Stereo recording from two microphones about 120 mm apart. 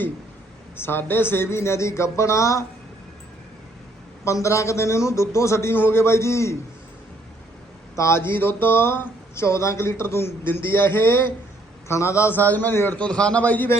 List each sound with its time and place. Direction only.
0.8 s speech: 20° left (ahead or behind)
4.2 s speech: 25° left (ahead or behind)
7.9 s a man's voice: 20° left (ahead or behind)